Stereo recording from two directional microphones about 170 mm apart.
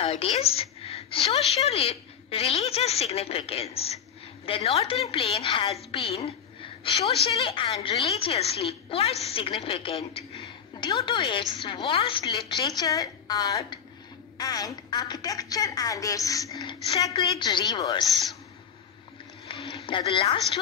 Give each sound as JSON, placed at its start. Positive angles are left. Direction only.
{"t": 0.0, "sound": "a woman's voice", "side_deg": 35}
{"t": 19.4, "sound": "a sound", "side_deg": 30}
{"t": 19.9, "sound": "a woman's voice", "side_deg": 30}